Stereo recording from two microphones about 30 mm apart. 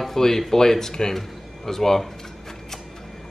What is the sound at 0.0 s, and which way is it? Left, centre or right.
Speech, centre.